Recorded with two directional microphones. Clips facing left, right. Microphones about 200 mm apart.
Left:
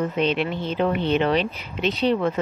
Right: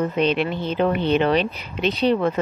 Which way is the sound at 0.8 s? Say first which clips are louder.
Right 2 dB; 50° right (ahead or behind).